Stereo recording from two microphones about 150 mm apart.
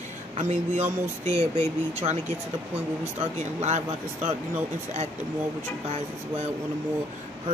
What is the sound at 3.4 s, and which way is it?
Speech, 50° right (ahead or behind).